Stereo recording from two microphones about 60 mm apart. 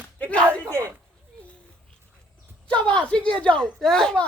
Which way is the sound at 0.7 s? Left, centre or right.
Right.